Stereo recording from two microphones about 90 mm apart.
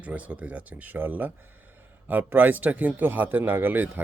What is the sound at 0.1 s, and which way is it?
Speech, 15° right (ahead or behind).